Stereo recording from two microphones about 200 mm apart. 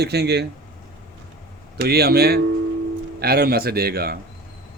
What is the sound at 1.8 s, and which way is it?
Speech, 50° right (ahead or behind).